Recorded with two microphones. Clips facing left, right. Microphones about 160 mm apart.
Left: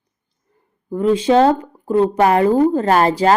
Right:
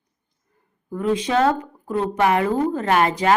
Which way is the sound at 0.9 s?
30° left (ahead or behind).